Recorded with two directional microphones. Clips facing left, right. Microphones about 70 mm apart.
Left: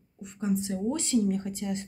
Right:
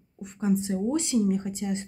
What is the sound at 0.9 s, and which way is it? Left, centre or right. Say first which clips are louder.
Speech: right 1 dB; centre.